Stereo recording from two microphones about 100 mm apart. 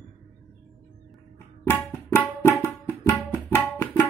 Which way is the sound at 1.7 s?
20° left (ahead or behind).